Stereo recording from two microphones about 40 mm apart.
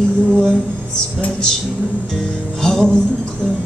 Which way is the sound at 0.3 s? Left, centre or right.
Centre.